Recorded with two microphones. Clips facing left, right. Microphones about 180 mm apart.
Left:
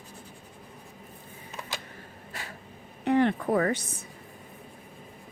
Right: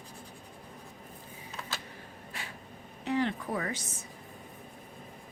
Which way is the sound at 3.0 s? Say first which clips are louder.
Left 7 dB; 60° left (ahead or behind).